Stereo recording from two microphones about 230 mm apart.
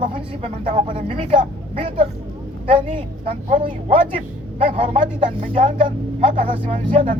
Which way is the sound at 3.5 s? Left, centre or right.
Right.